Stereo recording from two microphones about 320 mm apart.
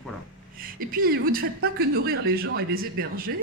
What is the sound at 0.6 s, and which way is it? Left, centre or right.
Speech, right.